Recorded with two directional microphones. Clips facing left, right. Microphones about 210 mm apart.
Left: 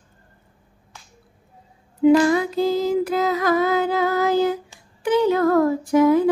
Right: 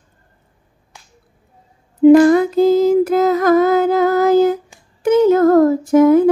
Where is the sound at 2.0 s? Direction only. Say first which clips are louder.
Right 7 dB; 50° right (ahead or behind).